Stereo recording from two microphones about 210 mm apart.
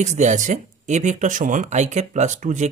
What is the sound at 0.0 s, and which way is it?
Speech, 35° right (ahead or behind).